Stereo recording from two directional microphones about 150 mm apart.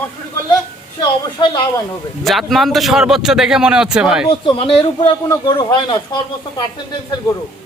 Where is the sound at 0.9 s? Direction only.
35° left (ahead or behind).